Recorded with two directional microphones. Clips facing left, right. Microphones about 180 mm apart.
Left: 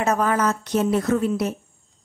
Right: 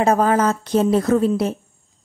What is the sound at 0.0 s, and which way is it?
A woman's voice, 30° right (ahead or behind).